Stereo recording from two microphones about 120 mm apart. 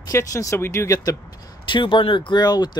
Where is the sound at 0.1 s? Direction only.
25° left (ahead or behind).